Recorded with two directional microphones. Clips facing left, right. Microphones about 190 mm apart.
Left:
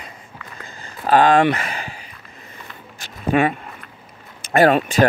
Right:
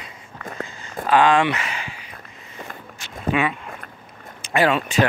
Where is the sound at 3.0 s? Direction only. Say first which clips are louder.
Left 4 dB; 45° left (ahead or behind).